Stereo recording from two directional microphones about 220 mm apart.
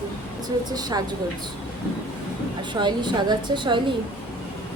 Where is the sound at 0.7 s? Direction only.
20° right (ahead or behind).